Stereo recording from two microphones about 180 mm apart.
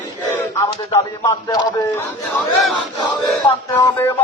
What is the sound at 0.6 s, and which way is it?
Speech, 15° left (ahead or behind).